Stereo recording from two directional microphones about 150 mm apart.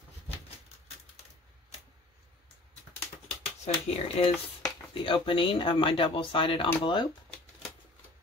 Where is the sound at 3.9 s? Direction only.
40° left (ahead or behind).